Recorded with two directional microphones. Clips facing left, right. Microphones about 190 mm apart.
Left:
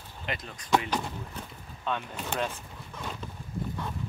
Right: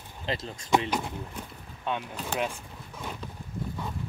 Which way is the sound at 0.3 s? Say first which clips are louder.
Right 4 dB; 25° right (ahead or behind).